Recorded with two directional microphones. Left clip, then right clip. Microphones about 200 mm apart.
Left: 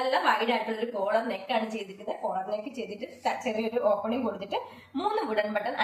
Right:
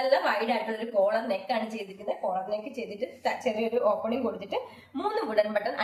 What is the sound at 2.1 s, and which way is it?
A woman's voice, 10° right (ahead or behind).